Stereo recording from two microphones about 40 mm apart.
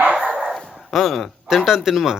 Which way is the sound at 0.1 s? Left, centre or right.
Right.